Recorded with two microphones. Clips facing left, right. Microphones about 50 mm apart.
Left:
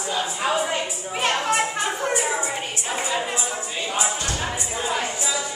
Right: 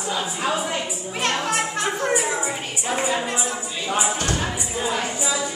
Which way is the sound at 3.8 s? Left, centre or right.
Centre.